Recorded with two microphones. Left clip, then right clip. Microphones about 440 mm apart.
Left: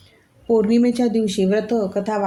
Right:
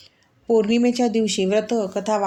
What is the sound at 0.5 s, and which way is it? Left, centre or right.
Speech, left.